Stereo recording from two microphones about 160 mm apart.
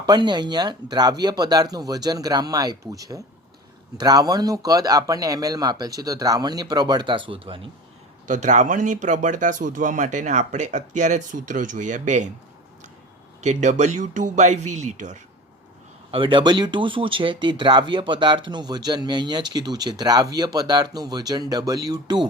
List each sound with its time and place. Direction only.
0.0 s speech: 25° right (ahead or behind)
8.3 s speech: 50° right (ahead or behind)
13.4 s speech: 50° right (ahead or behind)
16.1 s speech: 30° right (ahead or behind)